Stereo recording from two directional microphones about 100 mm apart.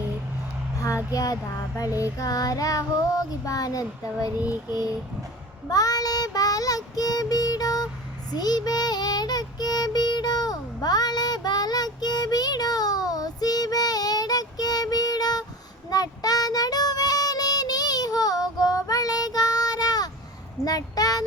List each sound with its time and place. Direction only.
1.1 s child singing: 35° left (ahead or behind)
4.4 s child singing: 15° right (ahead or behind)
4.7 s child singing: 40° left (ahead or behind)
8.3 s music: 40° left (ahead or behind)
15.9 s child singing: 40° left (ahead or behind)
20.7 s a sound: 40° left (ahead or behind)